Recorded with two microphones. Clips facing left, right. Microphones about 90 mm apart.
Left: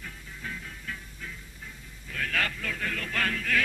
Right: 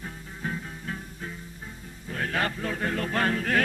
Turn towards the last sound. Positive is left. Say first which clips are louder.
# right 4 dB
turn(degrees=-40)  # may be behind; listen again after turning